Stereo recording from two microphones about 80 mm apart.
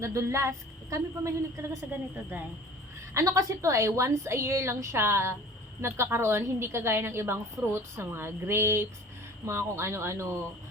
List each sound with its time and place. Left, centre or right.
0.0 s a woman's voice: right
3.2 s a woman's voice: right